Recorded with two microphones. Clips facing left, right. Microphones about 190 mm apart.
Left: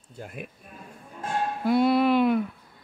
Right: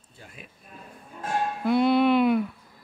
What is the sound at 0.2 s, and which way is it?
Speech, 55° left (ahead or behind).